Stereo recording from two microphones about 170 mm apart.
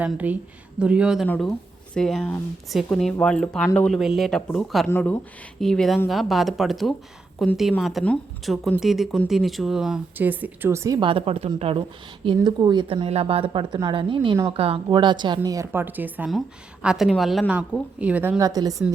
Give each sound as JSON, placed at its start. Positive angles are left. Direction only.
{"t": 0.0, "sound": "speech", "side_deg": -10}
{"t": 1.3, "sound": "speech", "side_deg": 10}
{"t": 4.9, "sound": "speech", "side_deg": 15}
{"t": 5.5, "sound": "speech", "side_deg": 0}
{"t": 11.1, "sound": "speech", "side_deg": -35}
{"t": 15.4, "sound": "speech", "side_deg": -15}